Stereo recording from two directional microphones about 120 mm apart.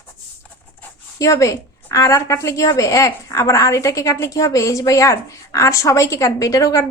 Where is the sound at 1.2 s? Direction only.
25° left (ahead or behind).